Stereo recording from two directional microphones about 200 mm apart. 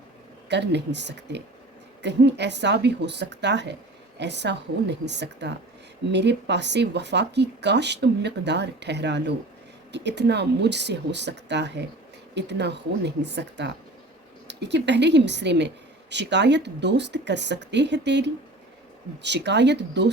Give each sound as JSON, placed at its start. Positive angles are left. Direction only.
{"t": 0.4, "sound": "a woman's voice", "side_deg": -60}